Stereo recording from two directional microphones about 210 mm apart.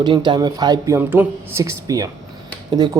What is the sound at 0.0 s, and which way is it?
Speech, 20° right (ahead or behind).